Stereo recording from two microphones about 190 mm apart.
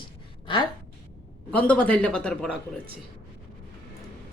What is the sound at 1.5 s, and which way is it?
A man's voice, 5° left (ahead or behind).